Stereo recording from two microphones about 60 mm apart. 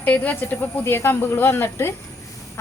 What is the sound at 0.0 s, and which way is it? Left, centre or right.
Speech, left.